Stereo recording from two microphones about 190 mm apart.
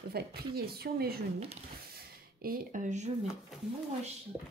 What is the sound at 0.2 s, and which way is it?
Speech, 55° right (ahead or behind).